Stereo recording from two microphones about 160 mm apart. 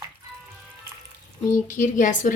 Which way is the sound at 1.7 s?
55° left (ahead or behind).